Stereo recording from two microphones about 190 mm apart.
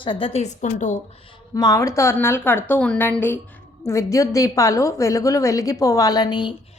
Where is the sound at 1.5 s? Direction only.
20° left (ahead or behind).